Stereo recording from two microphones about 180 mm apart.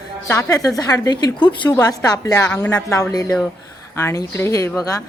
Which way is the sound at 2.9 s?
20° left (ahead or behind).